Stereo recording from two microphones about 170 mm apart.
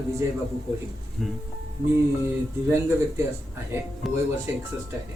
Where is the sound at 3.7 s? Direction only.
15° right (ahead or behind).